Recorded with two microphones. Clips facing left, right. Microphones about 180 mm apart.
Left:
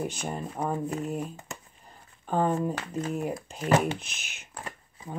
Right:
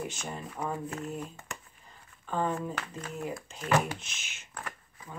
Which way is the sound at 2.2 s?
40° left (ahead or behind).